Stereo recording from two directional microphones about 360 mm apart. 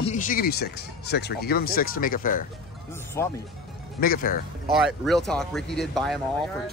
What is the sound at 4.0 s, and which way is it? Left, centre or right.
Speech, left.